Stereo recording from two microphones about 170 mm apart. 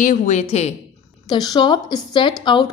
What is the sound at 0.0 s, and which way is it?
Speech, 45° left (ahead or behind).